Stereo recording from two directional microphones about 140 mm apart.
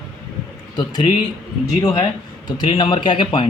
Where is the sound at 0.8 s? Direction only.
30° left (ahead or behind).